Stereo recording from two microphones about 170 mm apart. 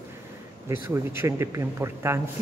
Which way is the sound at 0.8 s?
15° right (ahead or behind).